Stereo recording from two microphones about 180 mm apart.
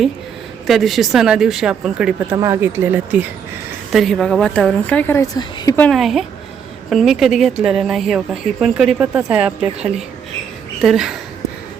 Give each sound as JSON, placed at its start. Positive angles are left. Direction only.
{"t": 0.7, "sound": "speech", "side_deg": 0}
{"t": 2.3, "sound": "speech", "side_deg": -15}
{"t": 3.9, "sound": "speech", "side_deg": 0}
{"t": 5.8, "sound": "speech", "side_deg": 0}